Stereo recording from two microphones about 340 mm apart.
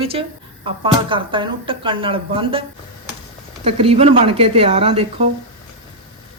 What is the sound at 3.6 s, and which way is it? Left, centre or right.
Speech, centre.